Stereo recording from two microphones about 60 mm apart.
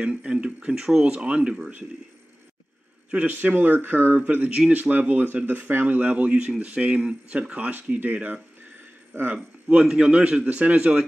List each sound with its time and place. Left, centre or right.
0.0 s speech: centre
3.1 s speech: right